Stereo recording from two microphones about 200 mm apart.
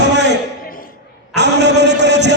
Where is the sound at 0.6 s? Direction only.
45° left (ahead or behind).